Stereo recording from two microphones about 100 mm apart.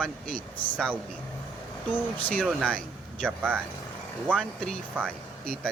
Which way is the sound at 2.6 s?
10° left (ahead or behind).